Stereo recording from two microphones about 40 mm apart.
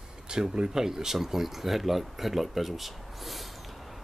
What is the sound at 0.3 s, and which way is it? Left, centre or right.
Speech, centre.